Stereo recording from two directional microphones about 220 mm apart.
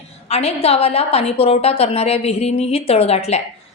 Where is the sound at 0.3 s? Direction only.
25° left (ahead or behind).